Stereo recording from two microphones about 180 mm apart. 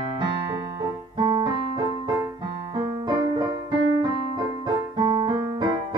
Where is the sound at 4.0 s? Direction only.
25° right (ahead or behind).